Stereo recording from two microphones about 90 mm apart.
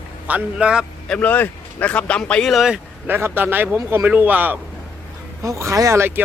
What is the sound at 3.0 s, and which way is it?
Speech, 25° right (ahead or behind).